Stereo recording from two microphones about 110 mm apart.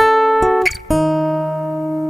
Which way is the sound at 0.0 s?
Centre (ahead or behind).